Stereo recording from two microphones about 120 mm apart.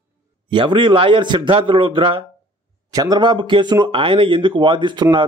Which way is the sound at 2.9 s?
35° right (ahead or behind).